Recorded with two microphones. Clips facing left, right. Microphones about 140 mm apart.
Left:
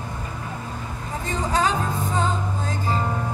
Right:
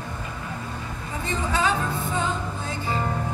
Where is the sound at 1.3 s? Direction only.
40° left (ahead or behind).